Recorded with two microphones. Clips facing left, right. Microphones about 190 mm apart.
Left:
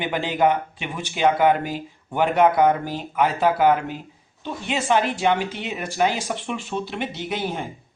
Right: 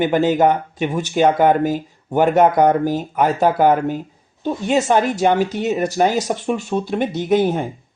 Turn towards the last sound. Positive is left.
turn(degrees=-45)  # may be behind; listen again after turning